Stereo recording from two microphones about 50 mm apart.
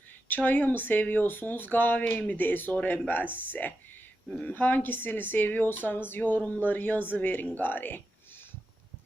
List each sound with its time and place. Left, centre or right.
0.3 s speech: left